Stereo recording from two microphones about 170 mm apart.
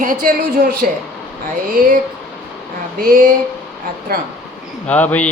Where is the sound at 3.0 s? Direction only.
60° right (ahead or behind).